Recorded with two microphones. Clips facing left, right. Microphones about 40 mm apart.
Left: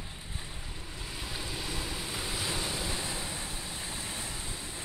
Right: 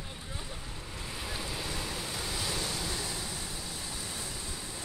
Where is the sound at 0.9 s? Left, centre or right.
Centre.